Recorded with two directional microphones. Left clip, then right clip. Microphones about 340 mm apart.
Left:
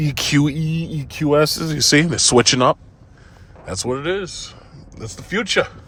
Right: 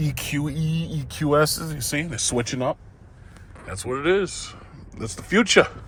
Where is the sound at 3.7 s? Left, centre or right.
Centre.